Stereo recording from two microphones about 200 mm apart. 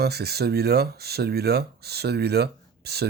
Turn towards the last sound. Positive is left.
turn(degrees=-55)  # may be behind; listen again after turning